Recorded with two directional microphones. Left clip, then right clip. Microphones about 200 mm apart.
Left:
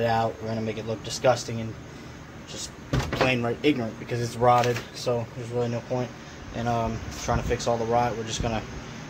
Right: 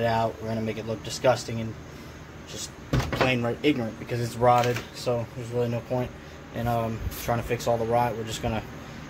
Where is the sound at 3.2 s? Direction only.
Centre (ahead or behind).